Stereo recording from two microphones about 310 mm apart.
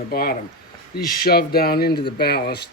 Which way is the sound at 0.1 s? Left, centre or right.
Left.